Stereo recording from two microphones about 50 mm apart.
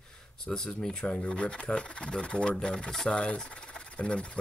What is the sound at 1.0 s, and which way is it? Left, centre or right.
Speech, left.